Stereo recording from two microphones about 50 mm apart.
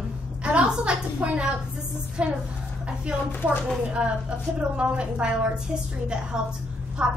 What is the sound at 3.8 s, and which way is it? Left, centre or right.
A woman's voice, right.